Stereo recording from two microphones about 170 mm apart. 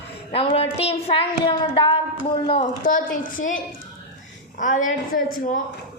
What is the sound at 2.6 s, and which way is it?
Speech, 50° left (ahead or behind).